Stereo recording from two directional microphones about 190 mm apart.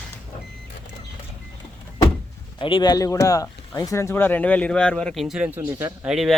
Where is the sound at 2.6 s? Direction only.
25° left (ahead or behind).